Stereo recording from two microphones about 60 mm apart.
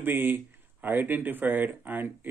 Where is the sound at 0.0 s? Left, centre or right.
Right.